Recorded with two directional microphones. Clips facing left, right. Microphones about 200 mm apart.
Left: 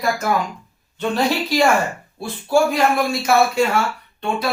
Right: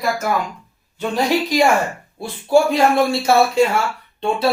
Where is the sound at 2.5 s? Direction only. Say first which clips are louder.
Right 2 dB; 25° right (ahead or behind).